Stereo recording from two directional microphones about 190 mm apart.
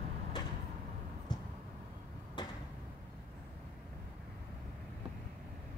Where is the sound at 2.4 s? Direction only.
20° left (ahead or behind).